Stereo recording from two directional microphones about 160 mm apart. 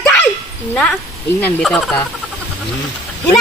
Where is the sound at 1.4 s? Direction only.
5° left (ahead or behind).